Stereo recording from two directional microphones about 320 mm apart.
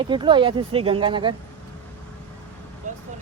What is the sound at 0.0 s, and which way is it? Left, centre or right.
Speech, centre.